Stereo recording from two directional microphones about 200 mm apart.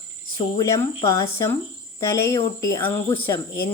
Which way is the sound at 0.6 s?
15° left (ahead or behind).